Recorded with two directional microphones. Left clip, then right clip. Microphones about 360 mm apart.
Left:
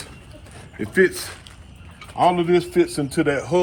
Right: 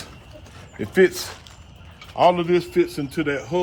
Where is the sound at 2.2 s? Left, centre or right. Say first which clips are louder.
Even; centre.